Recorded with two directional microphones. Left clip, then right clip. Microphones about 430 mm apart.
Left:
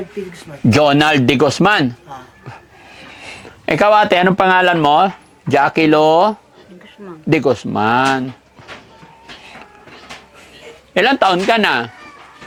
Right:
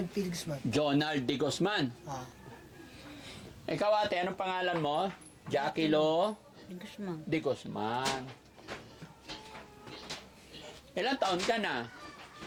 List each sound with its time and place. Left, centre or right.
0.7 s speech: left
3.7 s speech: left
10.9 s a man's voice: left